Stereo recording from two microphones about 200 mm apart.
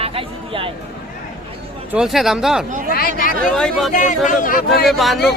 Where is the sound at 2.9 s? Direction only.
45° left (ahead or behind).